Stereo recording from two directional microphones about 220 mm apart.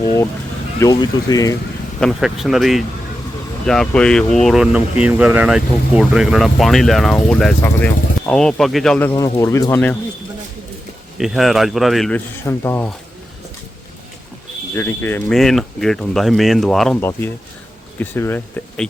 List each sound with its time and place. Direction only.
0.8 s speech: 20° left (ahead or behind)
2.0 s speech: centre (ahead or behind)
11.2 s speech: centre (ahead or behind)
14.8 s speech: 10° left (ahead or behind)